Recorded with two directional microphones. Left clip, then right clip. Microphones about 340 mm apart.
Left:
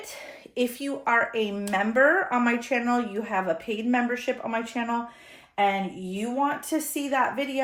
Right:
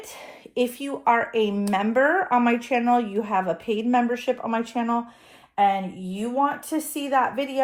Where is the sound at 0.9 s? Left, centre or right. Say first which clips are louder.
Right 2 dB; centre.